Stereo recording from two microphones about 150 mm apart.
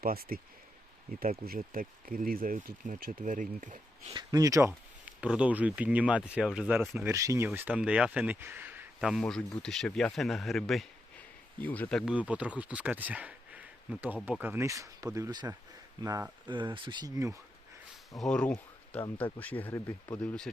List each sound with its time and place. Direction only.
0.0 s speech: 80° right
1.5 s speech: 70° right (ahead or behind)
4.1 s speech: 25° right (ahead or behind)
5.0 s speech: 10° right (ahead or behind)
9.0 s speech: centre (ahead or behind)
12.3 s speech: 10° right (ahead or behind); by 17.3 s 25° right (ahead or behind)
18.2 s speech: 5° left (ahead or behind)